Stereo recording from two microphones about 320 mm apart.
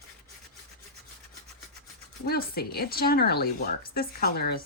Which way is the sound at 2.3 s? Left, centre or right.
Left.